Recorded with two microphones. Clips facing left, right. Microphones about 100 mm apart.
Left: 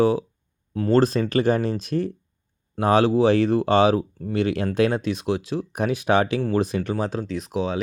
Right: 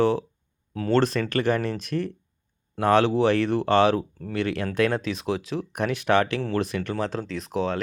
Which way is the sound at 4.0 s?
5° left (ahead or behind).